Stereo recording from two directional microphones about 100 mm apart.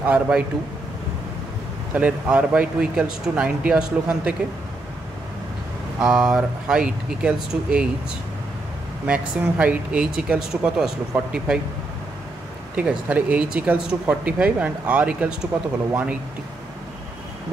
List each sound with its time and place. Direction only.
0.0 s speech: 10° right (ahead or behind)
2.0 s speech: 15° right (ahead or behind)
5.9 s speech: 10° right (ahead or behind)
9.0 s speech: 15° right (ahead or behind)
12.7 s speech: 15° right (ahead or behind)